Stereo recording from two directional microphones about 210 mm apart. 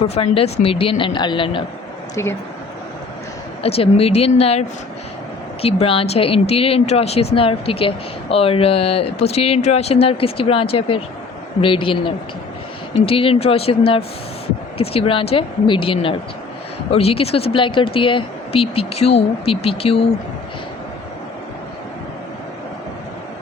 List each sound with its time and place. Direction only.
0.1 s speech: 30° left (ahead or behind)
3.6 s speech: 30° left (ahead or behind)
5.6 s speech: 25° left (ahead or behind)